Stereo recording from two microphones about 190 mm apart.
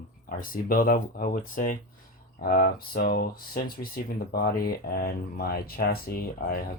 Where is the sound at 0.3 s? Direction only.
50° left (ahead or behind).